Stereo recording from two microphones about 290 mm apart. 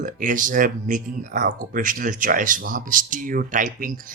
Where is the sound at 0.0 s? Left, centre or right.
Right.